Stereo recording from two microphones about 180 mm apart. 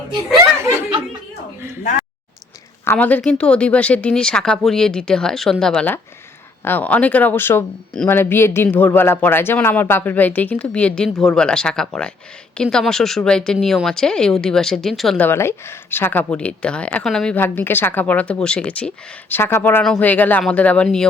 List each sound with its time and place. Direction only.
1.8 s speech: 40° left (ahead or behind)
2.8 s speech: 10° left (ahead or behind)